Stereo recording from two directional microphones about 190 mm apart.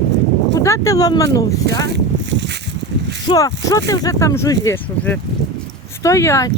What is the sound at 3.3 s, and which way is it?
Speech, 20° left (ahead or behind).